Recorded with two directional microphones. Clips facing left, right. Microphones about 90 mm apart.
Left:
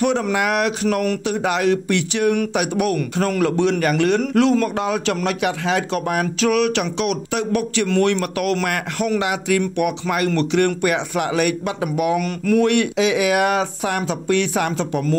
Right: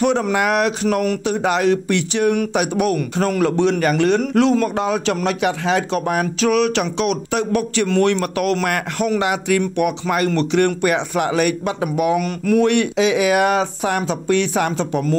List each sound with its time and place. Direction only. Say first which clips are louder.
0.0 s speech: right 2 dB; 35° right (ahead or behind)
9.2 s speech: right 2 dB; 40° right (ahead or behind)
9.6 s speech: right 1 dB; 30° right (ahead or behind)
12.2 s speech: right 1 dB; 20° right (ahead or behind)